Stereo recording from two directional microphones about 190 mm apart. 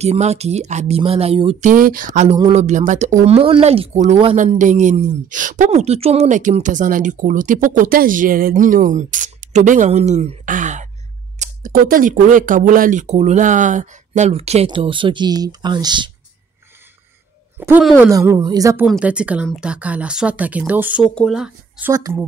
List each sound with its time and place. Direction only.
0.0 s speech: 35° right (ahead or behind)
1.7 s speech: 45° right (ahead or behind); by 16.1 s 25° right (ahead or behind)
17.6 s speech: 10° right (ahead or behind)
18.9 s speech: 5° right (ahead or behind)